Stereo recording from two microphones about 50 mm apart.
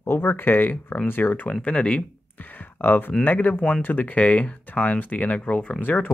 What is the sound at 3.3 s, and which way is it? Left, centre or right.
Speech, left.